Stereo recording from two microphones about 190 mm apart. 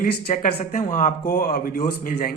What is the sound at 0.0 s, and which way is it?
Speech, 45° left (ahead or behind).